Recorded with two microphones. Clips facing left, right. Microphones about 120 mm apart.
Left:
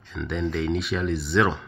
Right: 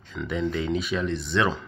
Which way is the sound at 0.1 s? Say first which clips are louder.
Even; centre (ahead or behind).